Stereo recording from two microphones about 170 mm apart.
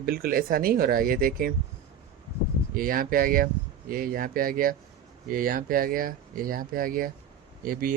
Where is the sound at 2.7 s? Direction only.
55° right (ahead or behind).